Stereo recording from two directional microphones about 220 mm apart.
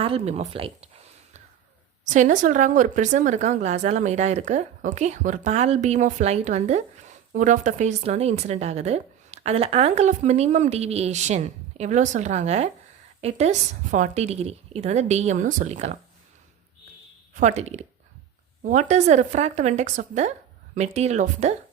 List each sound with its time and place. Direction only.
0.0 s a sound: 25° right (ahead or behind)
2.0 s a woman's voice: 35° right (ahead or behind)
17.3 s a woman's voice: 35° right (ahead or behind)